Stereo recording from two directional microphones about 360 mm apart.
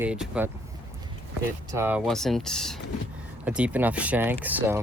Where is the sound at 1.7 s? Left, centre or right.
Centre.